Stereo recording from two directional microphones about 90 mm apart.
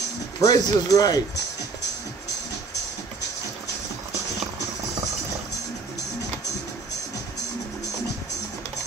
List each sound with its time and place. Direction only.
0.4 s speech: 45° left (ahead or behind)